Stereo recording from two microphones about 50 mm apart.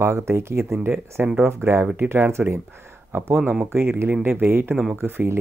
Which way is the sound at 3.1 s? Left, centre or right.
Right.